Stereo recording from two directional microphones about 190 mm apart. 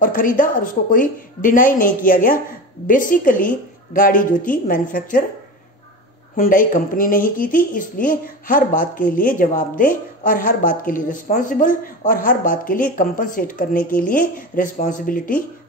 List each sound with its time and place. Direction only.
0.0 s speech: 45° left (ahead or behind)
6.3 s speech: 45° left (ahead or behind)